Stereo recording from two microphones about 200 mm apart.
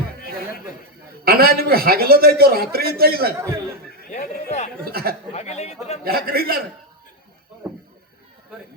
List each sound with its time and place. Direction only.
1.2 s a man's voice: 50° right (ahead or behind)
3.3 s speech: 15° right (ahead or behind)
4.1 s a sound: 35° left (ahead or behind)
4.9 s a man's voice: 50° right (ahead or behind)
5.3 s speech: 35° left (ahead or behind)
6.1 s a man's voice: 50° right (ahead or behind)
7.6 s goat: 5° right (ahead or behind)